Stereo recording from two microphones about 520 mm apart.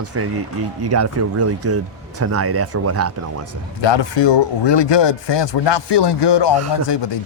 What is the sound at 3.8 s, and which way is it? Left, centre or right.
Speech, left.